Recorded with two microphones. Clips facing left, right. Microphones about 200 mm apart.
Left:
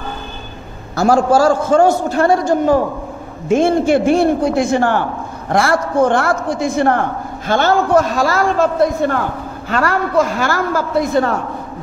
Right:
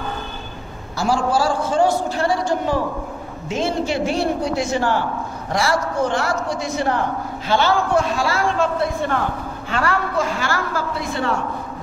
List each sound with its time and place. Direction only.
0.9 s a man's voice: 45° left (ahead or behind)